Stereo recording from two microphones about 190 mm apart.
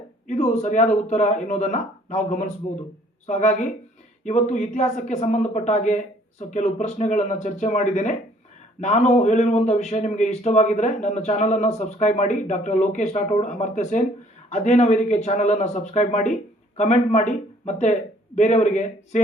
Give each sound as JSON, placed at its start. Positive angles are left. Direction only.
{"t": 0.3, "sound": "a man's voice", "side_deg": 35}